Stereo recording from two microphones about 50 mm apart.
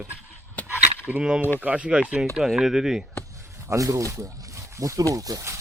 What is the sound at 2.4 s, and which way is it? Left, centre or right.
Speech, centre.